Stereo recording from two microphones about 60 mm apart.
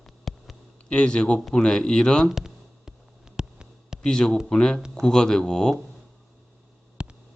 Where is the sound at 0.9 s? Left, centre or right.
Centre.